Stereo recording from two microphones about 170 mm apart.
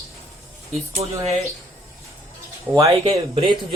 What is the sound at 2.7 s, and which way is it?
Speech, 15° right (ahead or behind).